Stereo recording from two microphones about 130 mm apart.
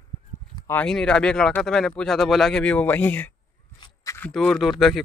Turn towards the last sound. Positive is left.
turn(degrees=0)  # may be behind; listen again after turning